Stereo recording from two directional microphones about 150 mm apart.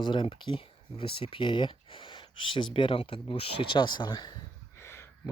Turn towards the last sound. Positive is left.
turn(degrees=20)  # may be behind; listen again after turning